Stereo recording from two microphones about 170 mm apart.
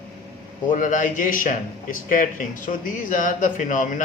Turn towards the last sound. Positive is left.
turn(degrees=50)  # may be behind; listen again after turning